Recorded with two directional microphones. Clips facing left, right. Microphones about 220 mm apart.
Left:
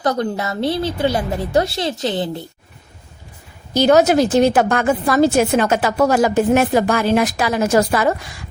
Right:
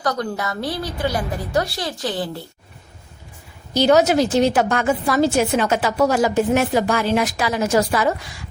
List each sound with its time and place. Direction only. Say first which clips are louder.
0.0 s a woman's voice: left 4 dB; 25° left (ahead or behind)
3.8 s a woman's voice: left 2 dB; 50° left (ahead or behind)